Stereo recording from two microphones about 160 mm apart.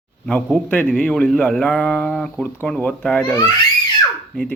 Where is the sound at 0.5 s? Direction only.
10° left (ahead or behind).